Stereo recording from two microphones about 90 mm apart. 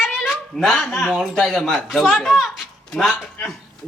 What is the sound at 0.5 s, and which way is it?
Speech, 5° left (ahead or behind).